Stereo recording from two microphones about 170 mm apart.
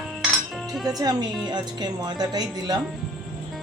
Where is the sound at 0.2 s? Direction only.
Centre (ahead or behind).